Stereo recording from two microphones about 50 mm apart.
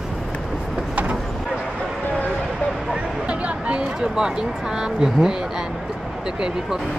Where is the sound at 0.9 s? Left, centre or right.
Right.